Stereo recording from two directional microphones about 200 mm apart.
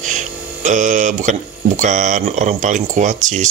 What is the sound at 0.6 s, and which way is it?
Speech, 40° right (ahead or behind).